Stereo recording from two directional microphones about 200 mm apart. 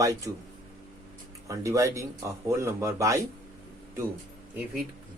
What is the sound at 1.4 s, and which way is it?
Speech, 15° right (ahead or behind).